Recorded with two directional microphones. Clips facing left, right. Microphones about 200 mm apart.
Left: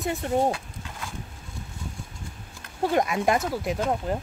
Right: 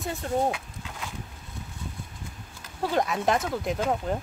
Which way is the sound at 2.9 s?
10° left (ahead or behind).